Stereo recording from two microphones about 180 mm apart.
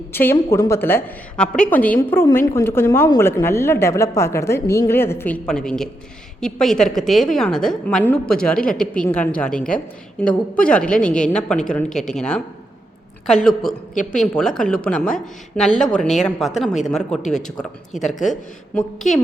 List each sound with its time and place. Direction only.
0.1 s a woman's voice: 10° left (ahead or behind)
13.9 s a woman's voice: 45° left (ahead or behind)
14.2 s a woman's voice: 5° left (ahead or behind)
17.9 s speech: 40° left (ahead or behind)